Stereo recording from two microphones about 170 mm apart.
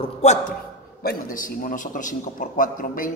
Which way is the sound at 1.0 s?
55° left (ahead or behind).